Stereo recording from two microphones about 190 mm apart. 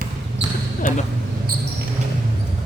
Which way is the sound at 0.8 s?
40° left (ahead or behind).